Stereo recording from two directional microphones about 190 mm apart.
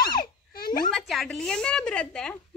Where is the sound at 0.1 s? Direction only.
50° left (ahead or behind).